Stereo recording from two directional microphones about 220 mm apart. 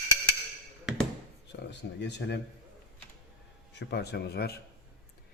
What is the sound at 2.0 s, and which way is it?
Speech, 50° left (ahead or behind).